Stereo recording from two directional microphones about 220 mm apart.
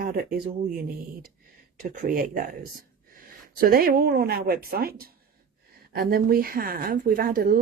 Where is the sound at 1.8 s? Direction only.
40° right (ahead or behind).